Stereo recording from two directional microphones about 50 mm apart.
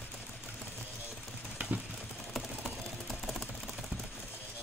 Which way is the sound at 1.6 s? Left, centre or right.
Right.